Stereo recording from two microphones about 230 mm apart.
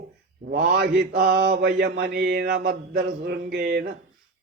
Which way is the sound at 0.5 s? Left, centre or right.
Right.